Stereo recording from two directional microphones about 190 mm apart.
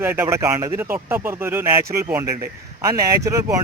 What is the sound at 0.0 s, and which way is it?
Speech, 10° right (ahead or behind).